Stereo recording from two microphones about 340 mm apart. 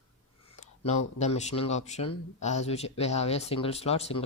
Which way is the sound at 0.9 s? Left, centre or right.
Centre.